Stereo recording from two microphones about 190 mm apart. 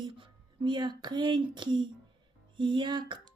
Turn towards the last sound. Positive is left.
turn(degrees=-25)  # may be behind; listen again after turning